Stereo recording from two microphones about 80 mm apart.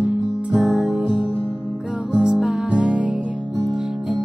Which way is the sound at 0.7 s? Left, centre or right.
Centre.